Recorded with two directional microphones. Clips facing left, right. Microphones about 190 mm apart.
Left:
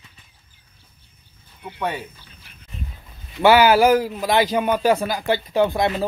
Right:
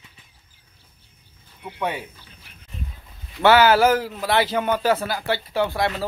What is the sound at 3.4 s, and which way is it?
A man's voice, 10° left (ahead or behind).